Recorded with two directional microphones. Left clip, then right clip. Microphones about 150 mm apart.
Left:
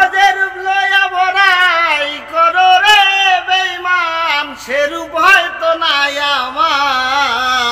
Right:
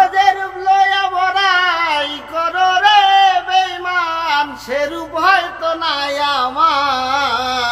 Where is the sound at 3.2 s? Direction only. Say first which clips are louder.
Left 1 dB; 10° right (ahead or behind).